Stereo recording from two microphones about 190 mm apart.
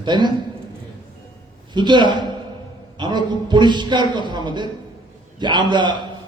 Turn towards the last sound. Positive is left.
turn(degrees=-25)  # may be behind; listen again after turning